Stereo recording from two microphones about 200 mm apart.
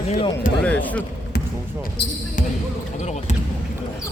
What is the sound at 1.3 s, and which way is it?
Basketball bounce, 55° left (ahead or behind).